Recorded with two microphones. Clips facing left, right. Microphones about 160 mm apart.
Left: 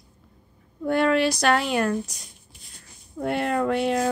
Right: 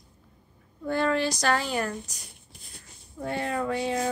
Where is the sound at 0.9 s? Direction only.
65° left (ahead or behind).